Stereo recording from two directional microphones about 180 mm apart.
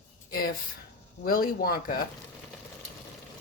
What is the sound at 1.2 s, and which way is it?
Speech, 55° left (ahead or behind).